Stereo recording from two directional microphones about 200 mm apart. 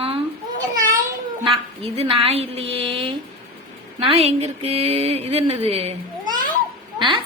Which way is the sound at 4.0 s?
30° right (ahead or behind).